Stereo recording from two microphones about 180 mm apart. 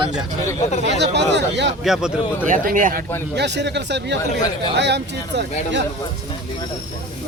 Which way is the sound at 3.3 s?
70° right (ahead or behind).